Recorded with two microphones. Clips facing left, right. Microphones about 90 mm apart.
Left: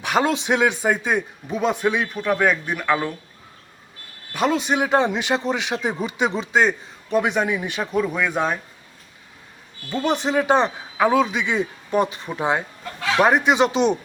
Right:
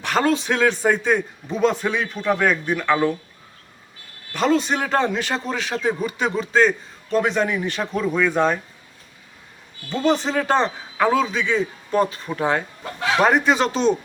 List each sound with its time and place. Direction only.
0.0 s a man's voice: 15° left (ahead or behind)
4.3 s a man's voice: 10° left (ahead or behind)
9.9 s a man's voice: 15° left (ahead or behind)